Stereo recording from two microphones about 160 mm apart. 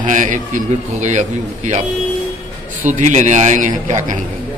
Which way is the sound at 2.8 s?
50° right (ahead or behind).